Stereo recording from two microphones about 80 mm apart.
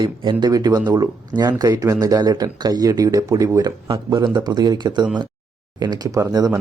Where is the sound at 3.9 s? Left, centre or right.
Right.